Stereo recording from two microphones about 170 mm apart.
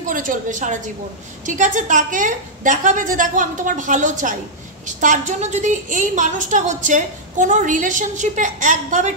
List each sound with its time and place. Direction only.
0.1 s a woman's voice: 50° right (ahead or behind)